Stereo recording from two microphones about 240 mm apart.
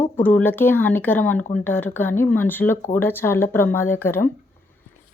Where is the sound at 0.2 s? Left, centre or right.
Centre.